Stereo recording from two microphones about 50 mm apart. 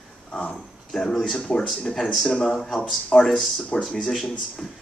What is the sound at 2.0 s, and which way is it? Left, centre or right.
Speech, centre.